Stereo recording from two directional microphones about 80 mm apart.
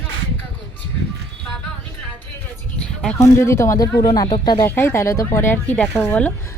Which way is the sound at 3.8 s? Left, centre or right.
Left.